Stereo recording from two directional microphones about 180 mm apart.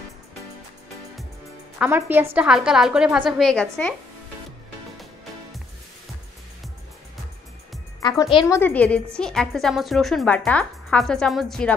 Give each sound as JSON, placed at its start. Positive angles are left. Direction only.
{"t": 1.8, "sound": "a woman's voice", "side_deg": -10}
{"t": 8.0, "sound": "a woman's voice", "side_deg": 20}